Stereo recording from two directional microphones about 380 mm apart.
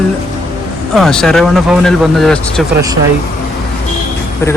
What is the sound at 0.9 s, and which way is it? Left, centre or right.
Speech, centre.